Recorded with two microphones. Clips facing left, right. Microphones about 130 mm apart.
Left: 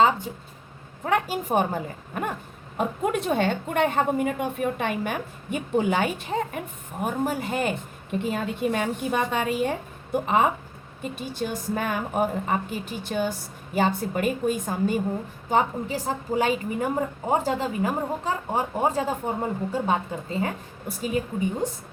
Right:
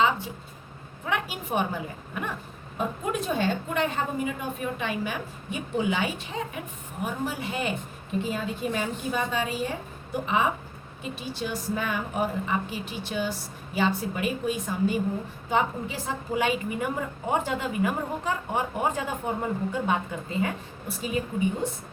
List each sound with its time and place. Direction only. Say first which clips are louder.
1.0 s a woman's voice: left 6 dB; 45° left (ahead or behind)
2.7 s a woman's voice: left 4 dB; 60° left (ahead or behind); by 7.7 s 45° left (ahead or behind)
8.2 s a woman's voice: left 4 dB; 60° left (ahead or behind); by 21.8 s 40° left (ahead or behind)